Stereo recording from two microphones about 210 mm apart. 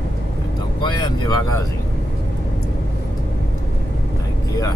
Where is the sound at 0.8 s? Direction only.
20° left (ahead or behind).